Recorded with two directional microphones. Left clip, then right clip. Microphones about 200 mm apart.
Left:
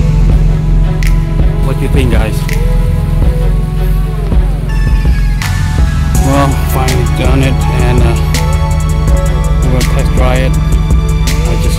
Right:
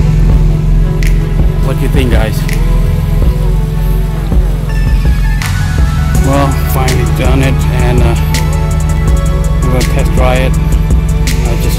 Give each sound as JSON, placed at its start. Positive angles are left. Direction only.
{"t": 6.2, "sound": "music", "side_deg": 15}
{"t": 7.2, "sound": "speech", "side_deg": 15}
{"t": 9.8, "sound": "speech", "side_deg": 0}